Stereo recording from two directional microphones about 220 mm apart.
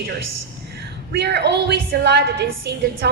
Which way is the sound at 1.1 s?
50° right (ahead or behind).